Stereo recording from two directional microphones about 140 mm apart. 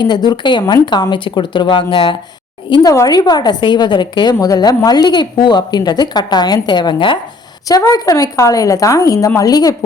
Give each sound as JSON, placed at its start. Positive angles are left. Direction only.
{"t": 0.0, "sound": "a woman's voice", "side_deg": 30}